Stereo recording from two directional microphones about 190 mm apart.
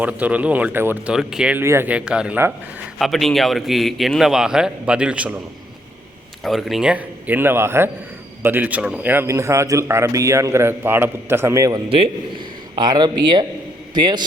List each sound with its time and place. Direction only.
0.0 s a man's voice: 5° right (ahead or behind)
6.4 s a man's voice: centre (ahead or behind); by 14.3 s 20° right (ahead or behind)